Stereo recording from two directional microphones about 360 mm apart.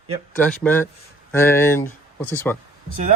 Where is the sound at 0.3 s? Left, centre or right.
Centre.